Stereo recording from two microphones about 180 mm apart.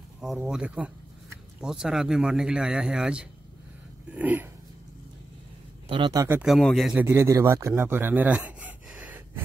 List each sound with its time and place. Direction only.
0.2 s a man's voice: 5° right (ahead or behind)
5.9 s speech: 25° right (ahead or behind)
6.2 s speech: 10° right (ahead or behind)
6.5 s a man's voice: centre (ahead or behind)
7.1 s speech: 15° right (ahead or behind)